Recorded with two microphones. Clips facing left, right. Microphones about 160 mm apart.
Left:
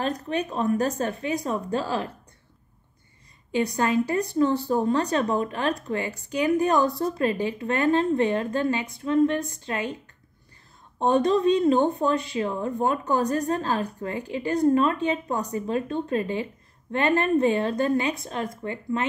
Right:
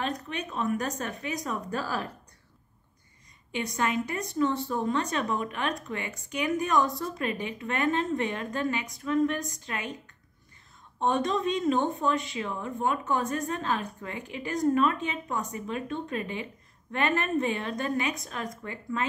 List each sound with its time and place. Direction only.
0.0 s speech: 35° left (ahead or behind)
3.5 s speech: 35° left (ahead or behind)
11.0 s speech: 35° left (ahead or behind)